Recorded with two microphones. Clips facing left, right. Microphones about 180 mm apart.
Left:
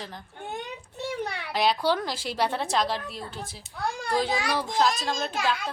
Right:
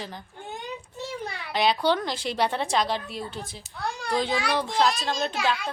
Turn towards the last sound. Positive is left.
turn(degrees=5)  # may be behind; listen again after turning